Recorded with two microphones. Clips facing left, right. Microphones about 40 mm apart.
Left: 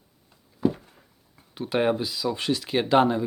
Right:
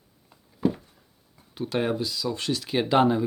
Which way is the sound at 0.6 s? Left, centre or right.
Centre.